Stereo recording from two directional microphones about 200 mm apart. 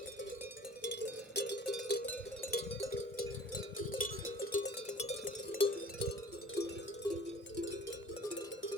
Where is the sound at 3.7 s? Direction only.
45° left (ahead or behind); by 5.8 s 25° left (ahead or behind).